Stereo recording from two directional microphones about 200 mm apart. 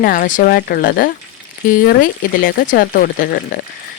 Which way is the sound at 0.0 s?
45° left (ahead or behind).